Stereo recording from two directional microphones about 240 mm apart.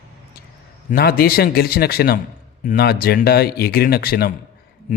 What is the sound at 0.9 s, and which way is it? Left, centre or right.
Speech, left.